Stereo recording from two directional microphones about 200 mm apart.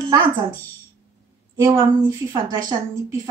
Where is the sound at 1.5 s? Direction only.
15° right (ahead or behind).